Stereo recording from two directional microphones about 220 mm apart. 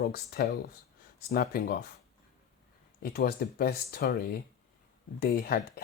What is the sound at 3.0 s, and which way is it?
Speech, 45° left (ahead or behind).